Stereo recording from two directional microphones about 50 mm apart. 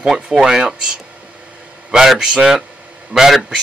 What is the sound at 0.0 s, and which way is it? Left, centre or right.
A man's voice, centre.